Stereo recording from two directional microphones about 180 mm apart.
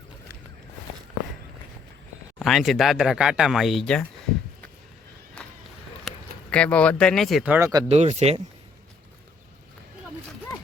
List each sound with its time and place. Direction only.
2.4 s speech: centre (ahead or behind)
5.4 s run: 5° left (ahead or behind)
6.1 s speech: 5° left (ahead or behind)
7.9 s speech: 40° right (ahead or behind)